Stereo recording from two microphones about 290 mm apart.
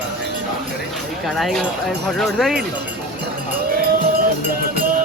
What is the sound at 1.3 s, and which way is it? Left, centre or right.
Speech, centre.